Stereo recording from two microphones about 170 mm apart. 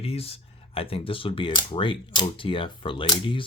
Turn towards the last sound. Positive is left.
turn(degrees=30)  # may be behind; listen again after turning